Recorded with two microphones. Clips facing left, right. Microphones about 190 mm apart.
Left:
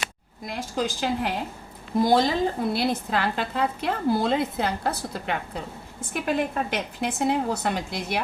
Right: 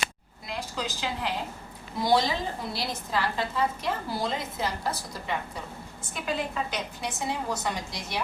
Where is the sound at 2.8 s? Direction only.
60° left (ahead or behind).